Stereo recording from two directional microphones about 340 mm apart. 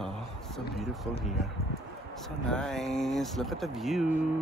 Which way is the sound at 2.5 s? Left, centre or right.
Centre.